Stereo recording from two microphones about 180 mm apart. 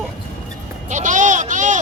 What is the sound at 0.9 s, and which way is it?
Speech, 45° right (ahead or behind).